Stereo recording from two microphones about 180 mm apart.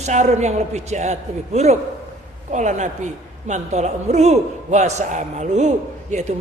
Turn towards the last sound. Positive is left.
turn(degrees=-40)  # may be behind; listen again after turning